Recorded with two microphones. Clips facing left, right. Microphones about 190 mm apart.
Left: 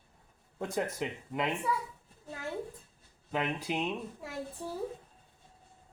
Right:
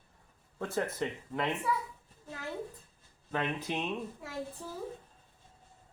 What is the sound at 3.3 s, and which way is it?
Speech, 10° left (ahead or behind).